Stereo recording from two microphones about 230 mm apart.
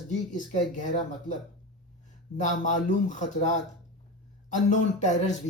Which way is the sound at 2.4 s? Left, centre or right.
Left.